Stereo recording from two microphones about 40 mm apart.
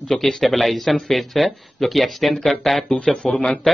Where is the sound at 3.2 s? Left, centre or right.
Centre.